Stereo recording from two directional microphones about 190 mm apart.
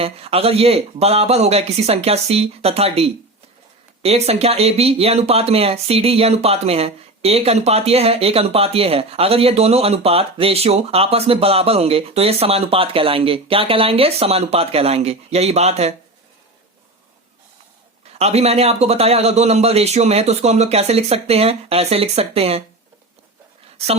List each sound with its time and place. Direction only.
0.0 s speech: 30° right (ahead or behind)
18.2 s speech: 35° right (ahead or behind)
23.7 s speech: 35° right (ahead or behind)